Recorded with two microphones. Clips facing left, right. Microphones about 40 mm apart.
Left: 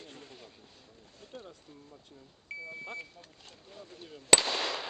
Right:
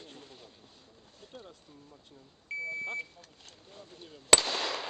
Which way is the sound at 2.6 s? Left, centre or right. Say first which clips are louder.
Right 8 dB; right.